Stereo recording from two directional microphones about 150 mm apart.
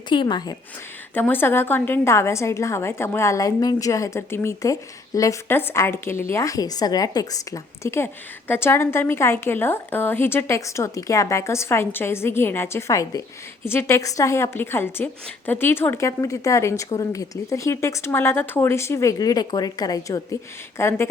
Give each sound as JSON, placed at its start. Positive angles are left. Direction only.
{"t": 0.1, "sound": "a woman's voice", "side_deg": 30}
{"t": 1.1, "sound": "a woman's voice", "side_deg": 15}